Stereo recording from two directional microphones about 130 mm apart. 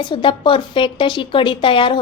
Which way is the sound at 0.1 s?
40° left (ahead or behind).